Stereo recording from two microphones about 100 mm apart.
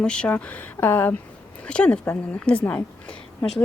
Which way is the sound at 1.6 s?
10° left (ahead or behind).